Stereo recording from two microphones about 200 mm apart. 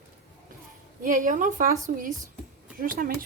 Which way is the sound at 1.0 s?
40° right (ahead or behind).